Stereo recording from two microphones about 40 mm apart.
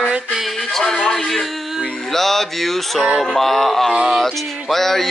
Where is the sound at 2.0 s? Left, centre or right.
Centre.